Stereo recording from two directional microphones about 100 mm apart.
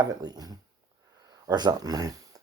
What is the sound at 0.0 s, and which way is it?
Speech, 40° right (ahead or behind).